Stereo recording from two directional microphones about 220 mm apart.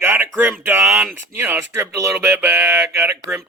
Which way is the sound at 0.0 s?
10° right (ahead or behind).